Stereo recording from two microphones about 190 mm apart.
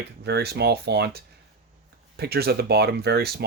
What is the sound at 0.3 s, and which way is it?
Speech, 60° right (ahead or behind).